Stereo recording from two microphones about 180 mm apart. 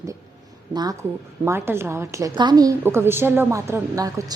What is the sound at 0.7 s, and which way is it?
A woman's voice, 25° right (ahead or behind).